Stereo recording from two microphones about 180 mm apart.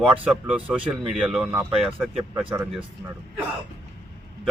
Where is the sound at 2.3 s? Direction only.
15° right (ahead or behind).